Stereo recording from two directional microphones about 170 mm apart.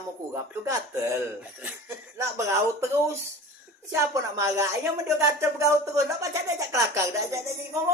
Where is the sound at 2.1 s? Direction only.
15° right (ahead or behind).